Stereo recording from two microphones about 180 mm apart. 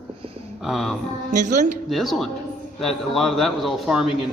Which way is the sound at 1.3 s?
45° right (ahead or behind).